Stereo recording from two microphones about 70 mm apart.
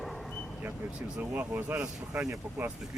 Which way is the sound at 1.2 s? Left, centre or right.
Right.